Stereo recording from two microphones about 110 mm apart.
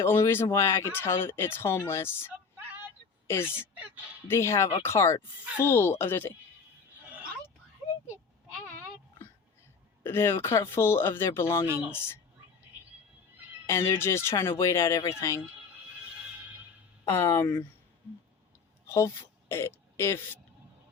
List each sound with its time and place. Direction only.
0.0 s a woman's voice: 25° left (ahead or behind)
3.5 s speech: 15° right (ahead or behind)
4.3 s speech: 25° left (ahead or behind)
10.0 s speech: 20° left (ahead or behind)
13.7 s speech: 25° left (ahead or behind)
17.1 s speech: 25° left (ahead or behind)
18.9 s speech: 25° left (ahead or behind)